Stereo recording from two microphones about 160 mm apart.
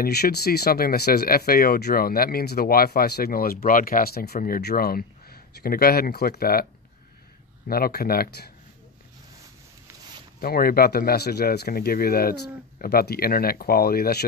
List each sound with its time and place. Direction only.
0.0 s speech: 90° left; by 8.5 s 70° left (ahead or behind)
10.4 s speech: 70° left (ahead or behind)